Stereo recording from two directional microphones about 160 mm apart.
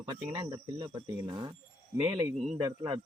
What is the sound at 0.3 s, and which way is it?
Speech, 25° right (ahead or behind).